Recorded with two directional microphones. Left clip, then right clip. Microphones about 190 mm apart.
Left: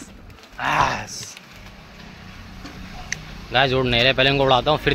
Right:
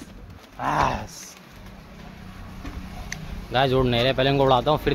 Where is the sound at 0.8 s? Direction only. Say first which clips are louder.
Left 3 dB; 15° right (ahead or behind).